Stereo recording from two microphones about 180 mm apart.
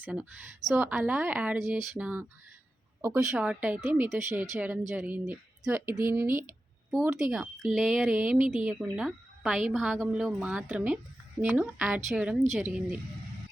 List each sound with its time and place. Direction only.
0.0 s a woman's voice: 5° right (ahead or behind)
6.9 s a woman's voice: 5° right (ahead or behind)